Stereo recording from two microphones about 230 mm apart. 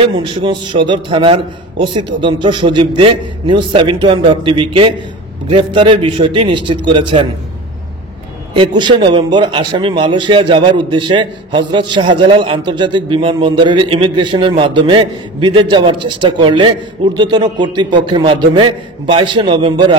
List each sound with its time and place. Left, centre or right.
0.0 s a man's voice: right
8.5 s a man's voice: right